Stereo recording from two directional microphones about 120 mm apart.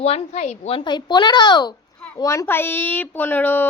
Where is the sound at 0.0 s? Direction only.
60° left (ahead or behind).